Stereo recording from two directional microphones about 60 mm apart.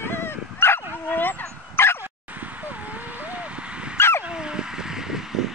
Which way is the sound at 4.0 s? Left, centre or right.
Left.